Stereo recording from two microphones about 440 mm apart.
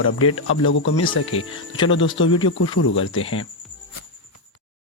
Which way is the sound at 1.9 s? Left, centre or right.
Left.